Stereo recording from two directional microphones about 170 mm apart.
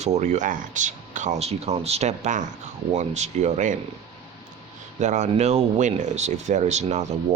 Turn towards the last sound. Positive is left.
turn(degrees=-40)  # may be behind; listen again after turning